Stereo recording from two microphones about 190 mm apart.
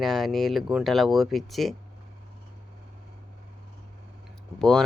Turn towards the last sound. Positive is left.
turn(degrees=5)  # may be behind; listen again after turning